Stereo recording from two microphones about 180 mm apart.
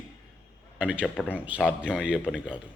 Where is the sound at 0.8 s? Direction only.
5° right (ahead or behind).